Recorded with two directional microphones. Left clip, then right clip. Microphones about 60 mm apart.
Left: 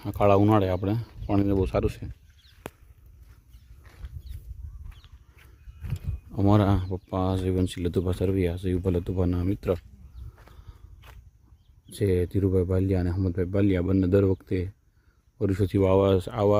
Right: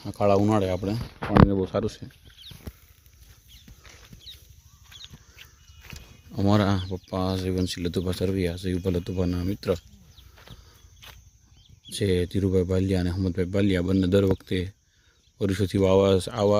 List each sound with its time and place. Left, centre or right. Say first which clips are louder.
0.0 s speech: left 1 dB; left
0.3 s speech: left 1 dB; centre
0.6 s speech: even; centre
1.5 s speech: left 1 dB; centre
5.4 s walk: right 5 dB; centre
6.3 s speech: even; left
10.7 s walk: right 6 dB; centre
11.9 s speech: even; centre